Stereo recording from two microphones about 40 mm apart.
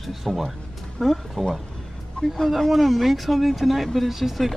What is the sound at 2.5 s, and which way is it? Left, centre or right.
Speech, centre.